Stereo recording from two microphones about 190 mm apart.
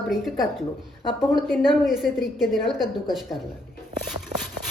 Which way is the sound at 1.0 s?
25° left (ahead or behind).